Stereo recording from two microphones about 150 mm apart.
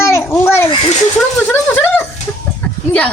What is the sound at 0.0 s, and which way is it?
Children playing, 20° left (ahead or behind).